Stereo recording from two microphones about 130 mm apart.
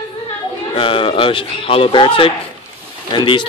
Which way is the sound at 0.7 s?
45° left (ahead or behind).